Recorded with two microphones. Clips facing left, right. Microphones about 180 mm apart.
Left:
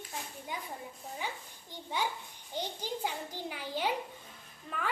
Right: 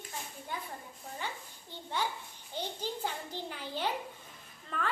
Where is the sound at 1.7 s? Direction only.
10° left (ahead or behind).